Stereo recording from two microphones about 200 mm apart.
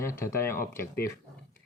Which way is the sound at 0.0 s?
15° left (ahead or behind).